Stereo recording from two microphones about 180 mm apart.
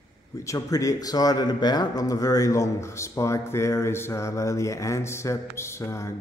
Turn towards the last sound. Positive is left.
turn(degrees=15)  # may be behind; listen again after turning